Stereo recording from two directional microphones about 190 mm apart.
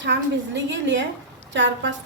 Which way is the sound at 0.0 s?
70° right (ahead or behind).